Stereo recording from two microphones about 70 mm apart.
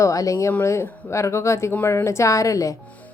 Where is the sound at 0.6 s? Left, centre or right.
Left.